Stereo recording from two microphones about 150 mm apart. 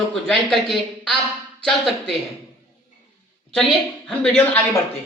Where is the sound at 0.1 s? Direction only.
Centre (ahead or behind).